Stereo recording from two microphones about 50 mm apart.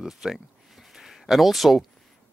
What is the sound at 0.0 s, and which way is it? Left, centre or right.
Speech, centre.